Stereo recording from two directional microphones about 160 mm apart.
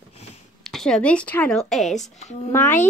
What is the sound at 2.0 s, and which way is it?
Speech, 45° left (ahead or behind).